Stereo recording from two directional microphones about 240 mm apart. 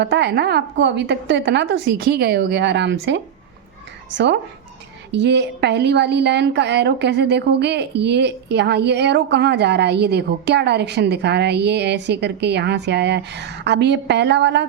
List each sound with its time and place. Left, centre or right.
0.0 s a woman's voice: right